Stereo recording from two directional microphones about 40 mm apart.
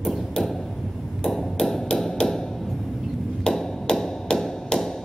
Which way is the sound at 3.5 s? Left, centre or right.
Centre.